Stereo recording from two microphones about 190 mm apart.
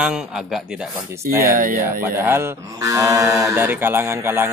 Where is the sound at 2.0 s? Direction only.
10° right (ahead or behind).